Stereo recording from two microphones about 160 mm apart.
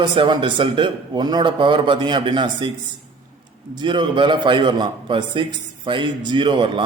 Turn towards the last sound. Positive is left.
turn(degrees=-30)  # may be behind; listen again after turning